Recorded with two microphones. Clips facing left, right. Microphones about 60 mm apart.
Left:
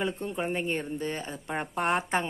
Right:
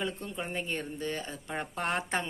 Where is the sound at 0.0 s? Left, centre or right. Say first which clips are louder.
Left 5 dB; left.